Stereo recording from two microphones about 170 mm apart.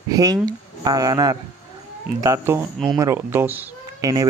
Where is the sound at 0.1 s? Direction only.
20° right (ahead or behind).